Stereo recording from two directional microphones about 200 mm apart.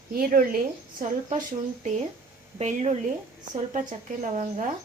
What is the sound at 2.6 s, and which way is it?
Speech, 30° right (ahead or behind).